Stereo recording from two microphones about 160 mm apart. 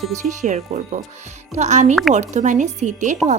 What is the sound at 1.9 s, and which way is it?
Speech, centre (ahead or behind).